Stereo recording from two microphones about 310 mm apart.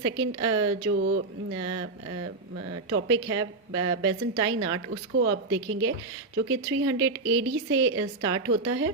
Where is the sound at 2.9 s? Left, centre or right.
Right.